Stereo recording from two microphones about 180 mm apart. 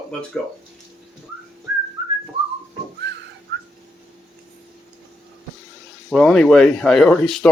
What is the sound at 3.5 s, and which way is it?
Whistling, 75° right (ahead or behind).